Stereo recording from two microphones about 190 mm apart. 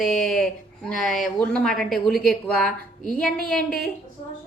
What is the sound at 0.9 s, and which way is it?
Speech, centre (ahead or behind).